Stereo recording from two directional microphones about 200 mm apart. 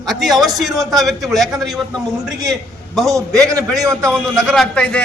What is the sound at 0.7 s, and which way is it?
Speech, 20° right (ahead or behind).